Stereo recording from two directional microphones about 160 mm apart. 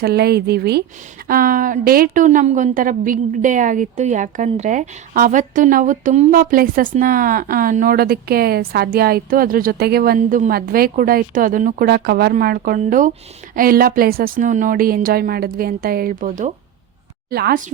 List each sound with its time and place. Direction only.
0.0 s speech: 85° right
1.3 s a woman's voice: 60° right (ahead or behind)
17.3 s speech: 75° right (ahead or behind)